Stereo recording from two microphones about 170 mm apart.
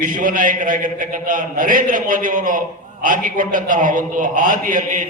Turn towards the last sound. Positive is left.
turn(degrees=-50)  # may be behind; listen again after turning